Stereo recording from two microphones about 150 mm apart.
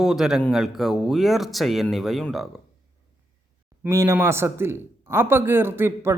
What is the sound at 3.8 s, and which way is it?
A man's voice, 20° right (ahead or behind).